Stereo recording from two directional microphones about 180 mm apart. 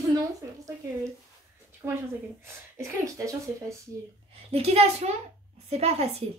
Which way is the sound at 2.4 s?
15° right (ahead or behind).